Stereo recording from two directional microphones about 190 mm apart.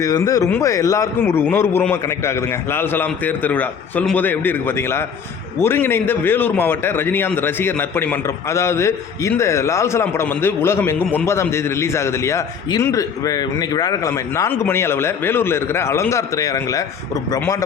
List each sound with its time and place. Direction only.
0.0 s a man's voice: 20° left (ahead or behind)